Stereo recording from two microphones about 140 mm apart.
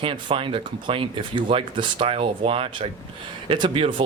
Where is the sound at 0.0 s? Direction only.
40° right (ahead or behind).